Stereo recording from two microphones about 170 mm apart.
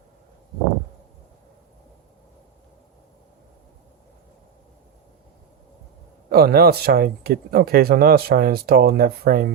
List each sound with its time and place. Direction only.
6.3 s speech: 65° right (ahead or behind)